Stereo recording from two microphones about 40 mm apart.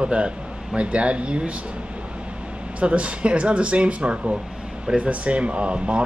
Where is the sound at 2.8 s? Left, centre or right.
Right.